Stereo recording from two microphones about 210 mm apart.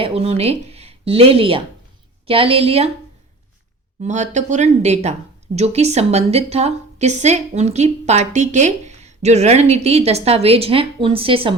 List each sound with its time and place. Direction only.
0.0 s a woman's voice: 30° right (ahead or behind)
4.0 s a woman's voice: 35° right (ahead or behind)